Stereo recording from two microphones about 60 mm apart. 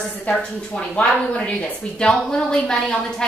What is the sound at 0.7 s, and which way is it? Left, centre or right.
Speech, left.